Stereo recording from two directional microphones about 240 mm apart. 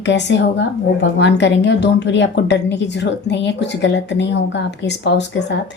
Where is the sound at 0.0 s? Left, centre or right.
Left.